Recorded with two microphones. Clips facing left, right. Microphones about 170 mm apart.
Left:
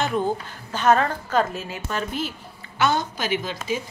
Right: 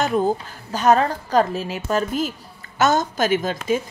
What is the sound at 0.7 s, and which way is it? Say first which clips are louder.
A woman's voice: right 2 dB; 35° right (ahead or behind).